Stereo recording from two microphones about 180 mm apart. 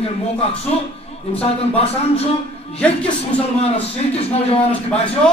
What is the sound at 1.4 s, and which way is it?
Speech, 35° left (ahead or behind).